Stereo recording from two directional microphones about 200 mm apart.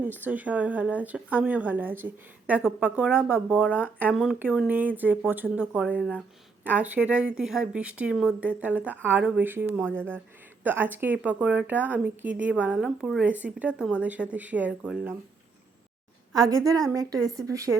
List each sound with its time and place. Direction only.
0.0 s a woman's voice: 10° right (ahead or behind)
16.3 s a woman's voice: 15° right (ahead or behind)